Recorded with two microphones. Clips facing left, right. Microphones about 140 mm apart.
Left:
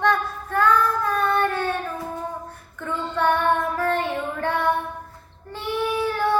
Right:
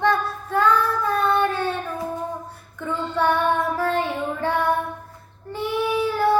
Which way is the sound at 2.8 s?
10° right (ahead or behind).